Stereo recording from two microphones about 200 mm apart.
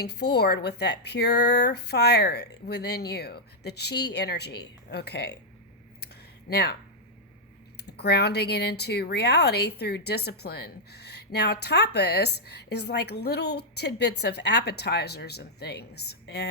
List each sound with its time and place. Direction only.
0.0 s speech: 55° left (ahead or behind)
6.5 s speech: 55° left (ahead or behind)
7.8 s speech: 55° left (ahead or behind)